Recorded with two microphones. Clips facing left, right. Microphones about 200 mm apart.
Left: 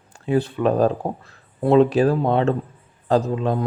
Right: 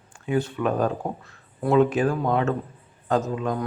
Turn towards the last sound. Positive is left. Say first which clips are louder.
# left 4 dB
turn(degrees=30)  # may be behind; listen again after turning